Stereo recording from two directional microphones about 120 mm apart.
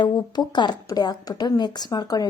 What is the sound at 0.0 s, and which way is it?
Speech, 40° left (ahead or behind).